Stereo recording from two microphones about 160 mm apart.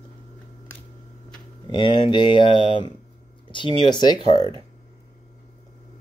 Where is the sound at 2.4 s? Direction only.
30° right (ahead or behind).